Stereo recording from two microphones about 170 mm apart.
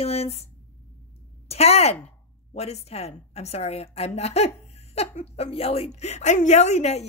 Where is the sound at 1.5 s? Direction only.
40° left (ahead or behind).